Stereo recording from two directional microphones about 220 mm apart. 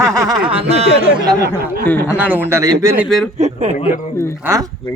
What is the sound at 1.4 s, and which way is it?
Speech, 45° right (ahead or behind).